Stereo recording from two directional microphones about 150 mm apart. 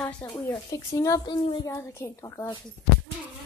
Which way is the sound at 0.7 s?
25° left (ahead or behind).